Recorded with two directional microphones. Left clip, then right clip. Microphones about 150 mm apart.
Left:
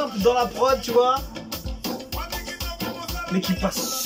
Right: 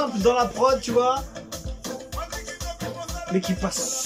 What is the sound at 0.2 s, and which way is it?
Speech, 5° right (ahead or behind).